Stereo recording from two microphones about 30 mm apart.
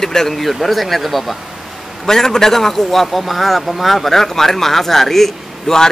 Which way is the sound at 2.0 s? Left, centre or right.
Centre.